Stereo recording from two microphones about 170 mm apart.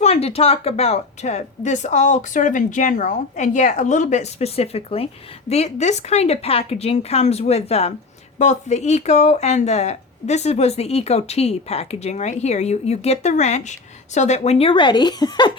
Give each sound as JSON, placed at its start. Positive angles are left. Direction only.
{"t": 0.0, "sound": "speech", "side_deg": 40}